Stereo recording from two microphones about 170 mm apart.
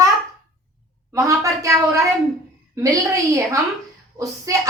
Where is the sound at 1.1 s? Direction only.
20° right (ahead or behind).